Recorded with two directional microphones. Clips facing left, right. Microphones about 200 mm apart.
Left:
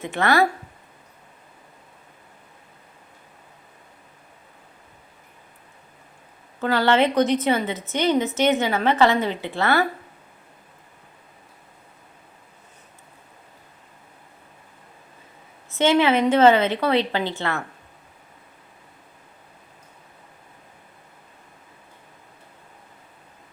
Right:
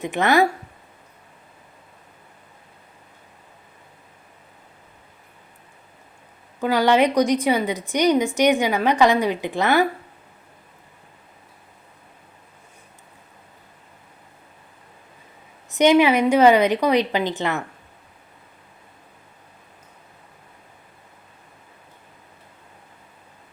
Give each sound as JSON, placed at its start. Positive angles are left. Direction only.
{"t": 0.0, "sound": "a woman's voice", "side_deg": -15}
{"t": 6.6, "sound": "a woman's voice", "side_deg": -15}
{"t": 15.7, "sound": "a woman's voice", "side_deg": -15}